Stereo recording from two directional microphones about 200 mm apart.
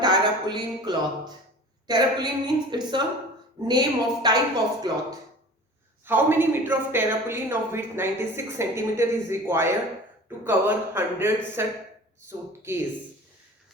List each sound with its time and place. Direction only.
0.0 s a sound: 20° right (ahead or behind)
1.9 s a woman's voice: 20° right (ahead or behind)
6.1 s speech: 10° right (ahead or behind)
12.7 s speech: 10° right (ahead or behind)